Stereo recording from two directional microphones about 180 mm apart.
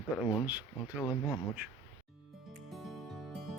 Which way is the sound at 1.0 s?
20° left (ahead or behind).